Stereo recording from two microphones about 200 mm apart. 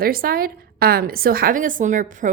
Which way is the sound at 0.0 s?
45° right (ahead or behind).